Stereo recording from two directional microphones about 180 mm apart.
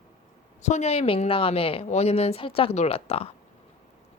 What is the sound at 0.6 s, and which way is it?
A woman's voice, 40° left (ahead or behind).